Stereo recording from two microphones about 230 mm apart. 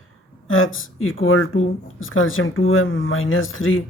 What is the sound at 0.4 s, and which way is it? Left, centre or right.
Speech, left.